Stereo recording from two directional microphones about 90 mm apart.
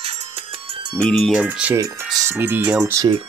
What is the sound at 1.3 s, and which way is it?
Speech, 15° right (ahead or behind).